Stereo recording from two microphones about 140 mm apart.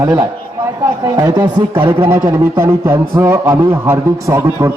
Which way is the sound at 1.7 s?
15° right (ahead or behind).